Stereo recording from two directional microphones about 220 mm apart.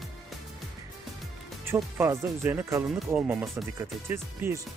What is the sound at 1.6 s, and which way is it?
Speech, 10° right (ahead or behind).